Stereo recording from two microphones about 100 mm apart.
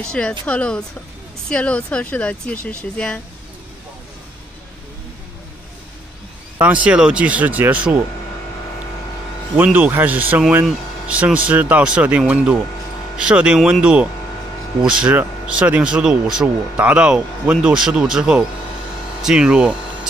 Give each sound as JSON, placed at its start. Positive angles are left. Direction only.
{"t": 0.0, "sound": "speech", "side_deg": 10}
{"t": 6.6, "sound": "speech", "side_deg": -10}
{"t": 9.6, "sound": "speech", "side_deg": -15}